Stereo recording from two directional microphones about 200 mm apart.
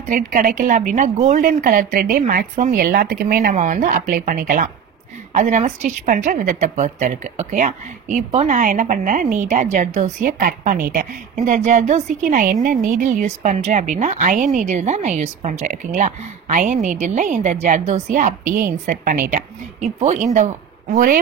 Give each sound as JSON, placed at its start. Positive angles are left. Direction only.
{"t": 0.1, "sound": "a woman's voice", "side_deg": -45}